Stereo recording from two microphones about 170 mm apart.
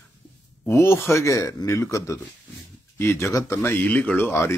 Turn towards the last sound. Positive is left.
turn(degrees=15)  # may be behind; listen again after turning